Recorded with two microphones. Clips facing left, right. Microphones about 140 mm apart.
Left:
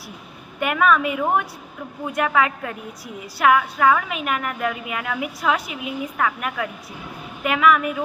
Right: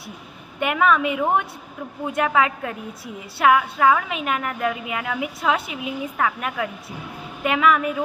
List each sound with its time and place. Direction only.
0.6 s a woman's voice: 25° right (ahead or behind)